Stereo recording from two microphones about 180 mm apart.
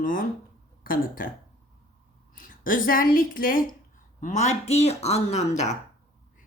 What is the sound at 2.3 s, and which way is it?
Speech, 50° left (ahead or behind).